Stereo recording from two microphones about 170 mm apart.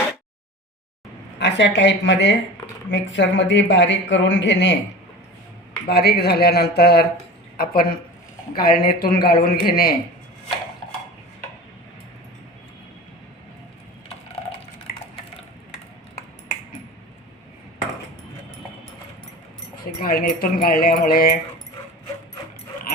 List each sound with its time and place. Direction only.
1.4 s speech: 90° left
5.9 s a woman's voice: 70° left (ahead or behind)
20.0 s speech: 55° left (ahead or behind)